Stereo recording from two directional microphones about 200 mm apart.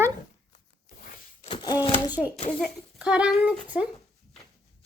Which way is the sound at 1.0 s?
40° left (ahead or behind).